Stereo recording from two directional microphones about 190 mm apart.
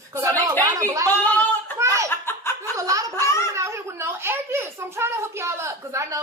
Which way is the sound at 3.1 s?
15° left (ahead or behind).